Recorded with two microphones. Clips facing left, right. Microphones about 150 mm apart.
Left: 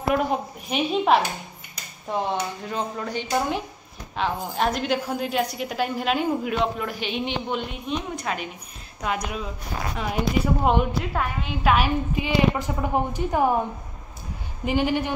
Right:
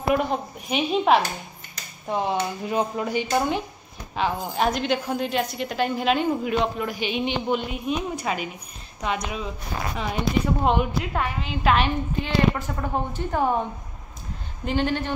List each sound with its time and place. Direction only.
0.1 s a woman's voice: centre (ahead or behind)
3.3 s a woman's voice: centre (ahead or behind)
9.9 s a woman's voice: 5° left (ahead or behind)
14.6 s a woman's voice: 10° left (ahead or behind)